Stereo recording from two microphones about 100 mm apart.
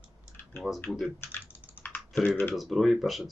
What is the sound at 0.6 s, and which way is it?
Speech, centre (ahead or behind).